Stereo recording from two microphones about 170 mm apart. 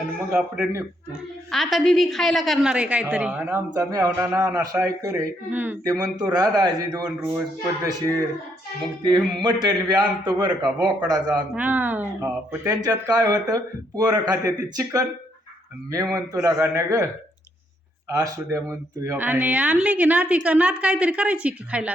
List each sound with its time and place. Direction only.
0.3 s a woman's voice: 5° right (ahead or behind)
5.9 s speech: 25° right (ahead or behind)
7.2 s a woman's voice: 15° right (ahead or behind)
9.0 s speech: 25° right (ahead or behind)
11.5 s speech: 10° right (ahead or behind)
16.1 s speech: 20° right (ahead or behind)
18.1 s a woman's voice: 20° right (ahead or behind)